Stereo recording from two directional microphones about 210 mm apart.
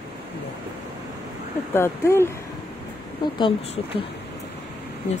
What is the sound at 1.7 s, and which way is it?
Speech, 10° left (ahead or behind).